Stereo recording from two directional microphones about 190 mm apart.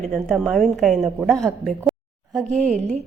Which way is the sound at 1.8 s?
10° right (ahead or behind).